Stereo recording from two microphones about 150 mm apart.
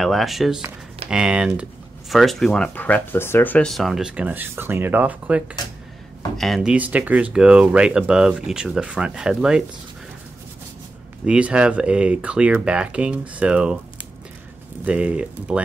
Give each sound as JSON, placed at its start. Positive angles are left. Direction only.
{"t": 0.0, "sound": "speech", "side_deg": 0}
{"t": 6.3, "sound": "speech", "side_deg": 0}
{"t": 11.2, "sound": "speech", "side_deg": -10}
{"t": 14.9, "sound": "speech", "side_deg": -10}